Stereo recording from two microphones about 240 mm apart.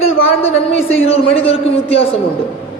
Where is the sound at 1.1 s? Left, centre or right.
Left.